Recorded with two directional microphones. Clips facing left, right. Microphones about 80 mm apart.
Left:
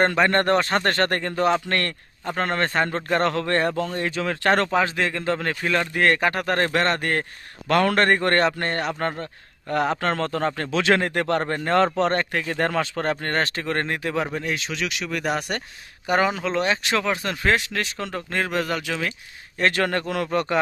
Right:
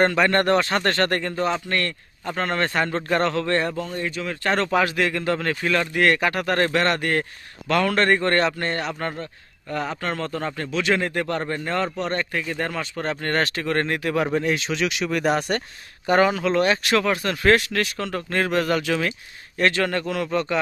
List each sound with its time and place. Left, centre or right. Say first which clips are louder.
0.0 s a man's voice: right 1 dB; left
1.4 s speech: left 6 dB; left
2.2 s a man's voice: even; left
3.8 s speech: left 2 dB; left
4.7 s speech: right 1 dB; left
7.7 s a man's voice: left 1 dB; left
9.6 s speech: left 4 dB; left
11.8 s speech: left 8 dB; left
13.2 s speech: right 1 dB; left
14.3 s speech: right 5 dB; centre
15.4 s speech: right 4 dB; centre
19.8 s speech: even; left
20.3 s speech: left 1 dB; left